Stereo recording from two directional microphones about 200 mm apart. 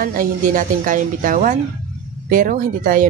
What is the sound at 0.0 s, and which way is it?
Speech, 45° right (ahead or behind).